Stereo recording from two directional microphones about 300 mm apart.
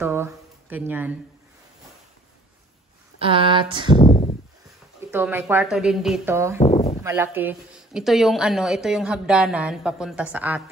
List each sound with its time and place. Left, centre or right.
0.0 s speech: centre
3.2 s a woman's voice: centre
4.0 s a sound: left
5.1 s a woman's voice: centre
6.6 s a sound: left
7.0 s a woman's voice: centre